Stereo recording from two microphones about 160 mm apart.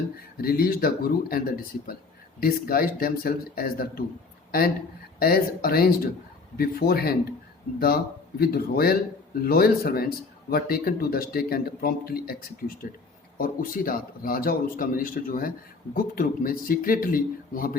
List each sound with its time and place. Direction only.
0.2 s speech: 70° left (ahead or behind)
5.2 s speech: 70° left (ahead or behind)
8.4 s speech: 75° left (ahead or behind)